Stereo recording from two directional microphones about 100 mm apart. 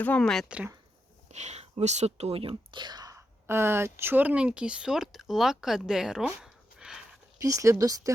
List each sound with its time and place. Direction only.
0.2 s speech: 5° left (ahead or behind)
0.4 s speech: 10° right (ahead or behind)
1.5 s speech: 90° right; by 3.2 s 45° right (ahead or behind)
3.2 s speech: 25° right (ahead or behind); by 7.0 s 5° right (ahead or behind)
7.3 s speech: 35° right (ahead or behind)